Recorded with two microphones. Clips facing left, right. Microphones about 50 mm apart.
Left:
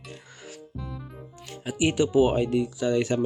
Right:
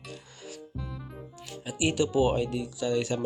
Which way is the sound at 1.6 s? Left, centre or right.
Left.